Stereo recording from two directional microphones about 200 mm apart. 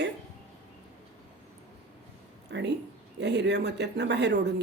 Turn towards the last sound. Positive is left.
turn(degrees=-60)  # may be behind; listen again after turning